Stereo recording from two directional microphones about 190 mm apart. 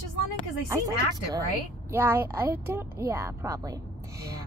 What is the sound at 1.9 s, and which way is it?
A woman's voice, 10° right (ahead or behind).